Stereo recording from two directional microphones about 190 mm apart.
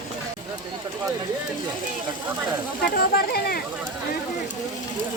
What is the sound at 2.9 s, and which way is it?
Speech, 55° left (ahead or behind).